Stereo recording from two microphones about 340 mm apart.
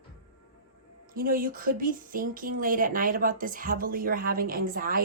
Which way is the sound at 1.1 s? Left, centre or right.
Right.